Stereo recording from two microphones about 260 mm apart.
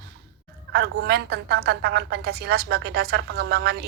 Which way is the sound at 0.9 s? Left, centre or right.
Right.